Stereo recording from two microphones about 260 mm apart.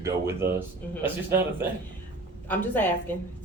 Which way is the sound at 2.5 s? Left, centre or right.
Centre.